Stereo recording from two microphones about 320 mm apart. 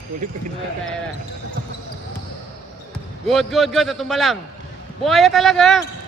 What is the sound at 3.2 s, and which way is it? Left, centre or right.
A man's voice, centre.